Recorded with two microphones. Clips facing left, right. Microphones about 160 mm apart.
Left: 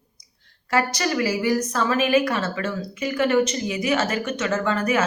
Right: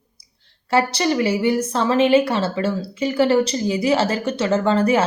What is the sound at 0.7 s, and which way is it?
A woman's voice, 30° right (ahead or behind).